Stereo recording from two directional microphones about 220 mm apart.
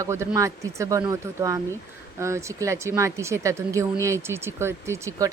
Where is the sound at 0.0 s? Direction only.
10° right (ahead or behind).